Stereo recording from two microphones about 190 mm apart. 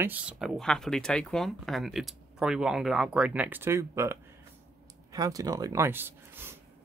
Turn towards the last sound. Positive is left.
turn(degrees=-10)  # may be behind; listen again after turning